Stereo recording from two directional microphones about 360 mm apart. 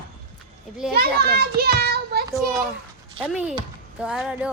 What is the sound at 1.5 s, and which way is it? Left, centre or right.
Child singing, right.